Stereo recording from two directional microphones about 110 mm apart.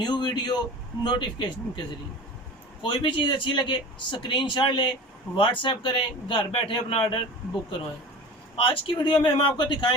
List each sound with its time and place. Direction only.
0.0 s speech: 40° left (ahead or behind)
2.8 s speech: 50° left (ahead or behind)
8.6 s speech: 50° left (ahead or behind)